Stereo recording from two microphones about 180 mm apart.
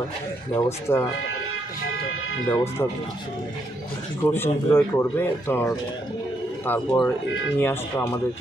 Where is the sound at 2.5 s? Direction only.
15° left (ahead or behind).